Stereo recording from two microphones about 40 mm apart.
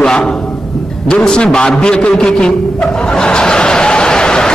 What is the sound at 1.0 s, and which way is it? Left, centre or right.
Speech, centre.